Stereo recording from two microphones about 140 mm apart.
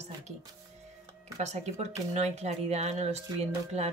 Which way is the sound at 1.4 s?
50° right (ahead or behind).